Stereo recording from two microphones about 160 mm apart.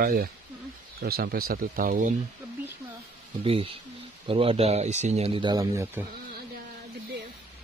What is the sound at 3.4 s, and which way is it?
Speech, 35° right (ahead or behind).